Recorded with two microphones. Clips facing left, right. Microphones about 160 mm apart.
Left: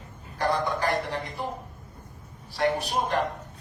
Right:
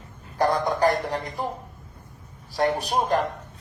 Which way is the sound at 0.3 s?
45° right (ahead or behind).